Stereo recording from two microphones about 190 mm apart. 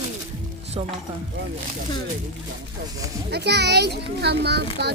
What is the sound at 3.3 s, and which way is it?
A child's voice, 60° right (ahead or behind).